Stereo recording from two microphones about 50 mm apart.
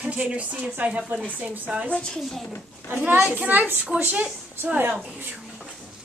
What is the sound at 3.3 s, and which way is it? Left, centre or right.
Speech, right.